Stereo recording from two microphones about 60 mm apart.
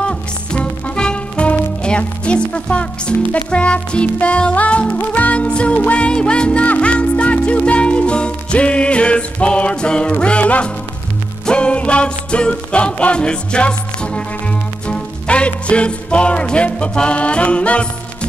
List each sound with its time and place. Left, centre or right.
0.0 s music: centre